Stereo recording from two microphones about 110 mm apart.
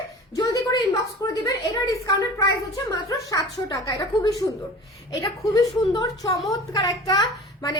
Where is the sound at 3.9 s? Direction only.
35° left (ahead or behind).